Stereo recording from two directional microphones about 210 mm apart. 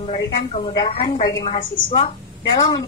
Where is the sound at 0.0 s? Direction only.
30° left (ahead or behind).